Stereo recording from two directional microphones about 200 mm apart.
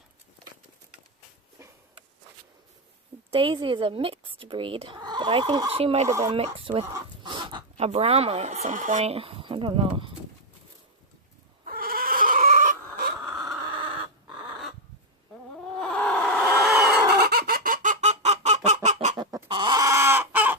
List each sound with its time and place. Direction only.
1.5 s a sound: 15° right (ahead or behind)
3.3 s speech: 25° right (ahead or behind)
6.1 s speech: 15° right (ahead or behind)
6.3 s speech: 30° right (ahead or behind)
11.6 s cat: 45° right (ahead or behind)
13.2 s dog: centre (ahead or behind)
15.8 s a sound: 5° left (ahead or behind)
16.7 s chicken: 5° right (ahead or behind)
17.2 s fowl: 50° right (ahead or behind); by 19.1 s 35° right (ahead or behind)
19.1 s chicken: 20° right (ahead or behind)